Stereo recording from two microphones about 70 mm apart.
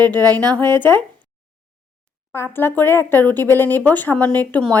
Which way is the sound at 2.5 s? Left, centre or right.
Left.